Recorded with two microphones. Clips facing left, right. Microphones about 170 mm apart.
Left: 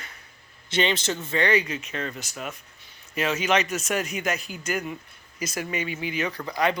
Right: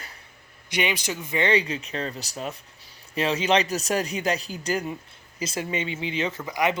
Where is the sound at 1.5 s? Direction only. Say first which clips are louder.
Right 1 dB; 30° right (ahead or behind).